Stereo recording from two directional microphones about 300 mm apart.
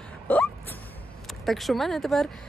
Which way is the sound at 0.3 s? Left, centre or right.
Centre.